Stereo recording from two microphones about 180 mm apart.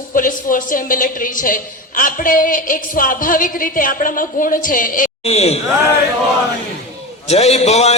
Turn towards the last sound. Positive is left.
turn(degrees=35)  # may be behind; listen again after turning